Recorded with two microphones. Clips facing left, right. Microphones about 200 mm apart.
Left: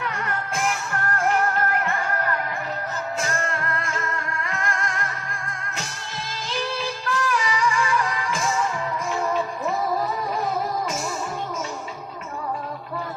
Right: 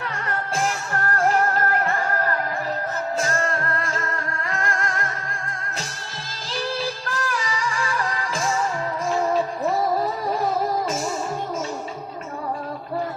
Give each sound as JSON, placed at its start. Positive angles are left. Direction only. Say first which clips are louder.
{"t": 0.5, "sound": "music", "louder": "right 2 dB", "side_deg": -35}
{"t": 7.0, "sound": "music", "louder": "left 3 dB", "side_deg": -35}